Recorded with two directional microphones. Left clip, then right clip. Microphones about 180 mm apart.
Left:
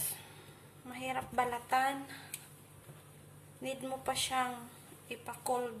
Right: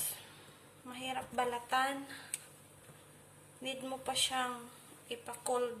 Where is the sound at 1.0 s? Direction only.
20° left (ahead or behind).